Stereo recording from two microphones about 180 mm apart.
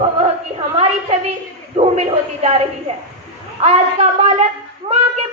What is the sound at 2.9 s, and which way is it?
A woman's voice, 35° right (ahead or behind).